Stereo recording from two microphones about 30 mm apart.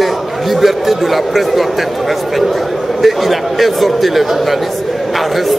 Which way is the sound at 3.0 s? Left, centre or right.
Centre.